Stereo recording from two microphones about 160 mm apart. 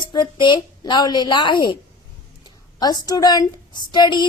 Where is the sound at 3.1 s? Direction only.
25° left (ahead or behind).